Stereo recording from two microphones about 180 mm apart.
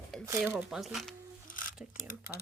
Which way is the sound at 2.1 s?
55° left (ahead or behind).